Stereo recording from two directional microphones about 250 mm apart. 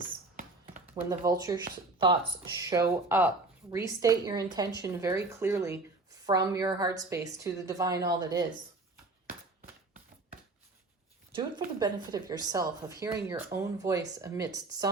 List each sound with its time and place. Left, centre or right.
0.0 s a sound: right
0.9 s a woman's voice: centre
11.3 s a woman's voice: centre